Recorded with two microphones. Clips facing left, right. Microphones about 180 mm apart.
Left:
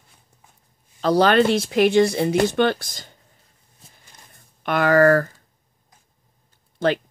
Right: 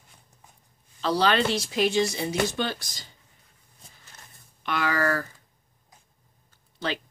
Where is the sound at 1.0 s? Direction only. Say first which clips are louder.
Left 7 dB; 50° left (ahead or behind).